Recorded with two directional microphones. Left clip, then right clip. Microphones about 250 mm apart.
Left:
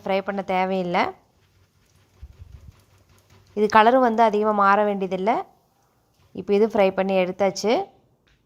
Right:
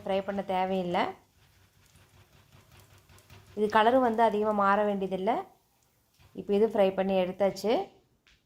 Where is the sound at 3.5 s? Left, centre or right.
Left.